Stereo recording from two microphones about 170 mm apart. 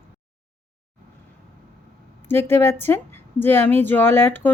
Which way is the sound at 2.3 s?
15° left (ahead or behind).